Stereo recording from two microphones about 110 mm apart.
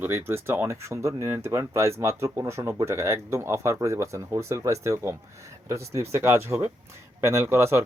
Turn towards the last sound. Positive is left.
turn(degrees=-25)  # may be behind; listen again after turning